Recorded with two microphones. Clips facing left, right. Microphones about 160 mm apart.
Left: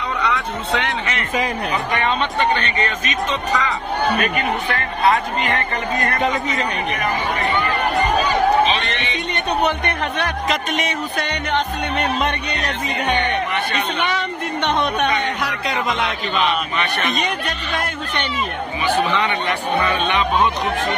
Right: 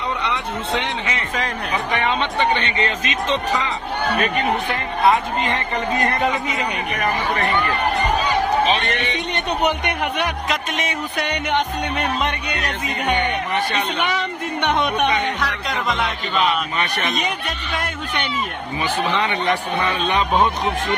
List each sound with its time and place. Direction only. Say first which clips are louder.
0.2 s a woman's voice: left 2 dB; 20° right (ahead or behind)
9.3 s speech: left 2 dB; 15° right (ahead or behind)
10.5 s speech: left 2 dB; 5° right (ahead or behind)
15.4 s speech: left 1 dB; 5° left (ahead or behind)